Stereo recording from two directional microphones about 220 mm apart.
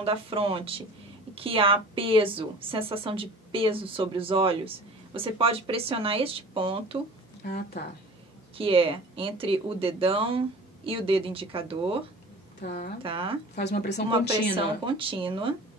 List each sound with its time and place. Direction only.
0.0 s speech: 25° right (ahead or behind)
7.4 s speech: 45° left (ahead or behind)
8.5 s speech: 25° right (ahead or behind)
12.6 s speech: 40° left (ahead or behind)
13.0 s speech: 25° right (ahead or behind)
13.6 s speech: 50° left (ahead or behind)
14.9 s speech: 25° right (ahead or behind)